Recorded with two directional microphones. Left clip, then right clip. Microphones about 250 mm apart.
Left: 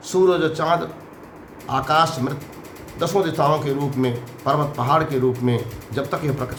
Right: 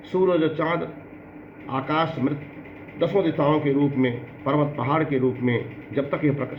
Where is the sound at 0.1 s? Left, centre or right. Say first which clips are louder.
Left 3 dB; left.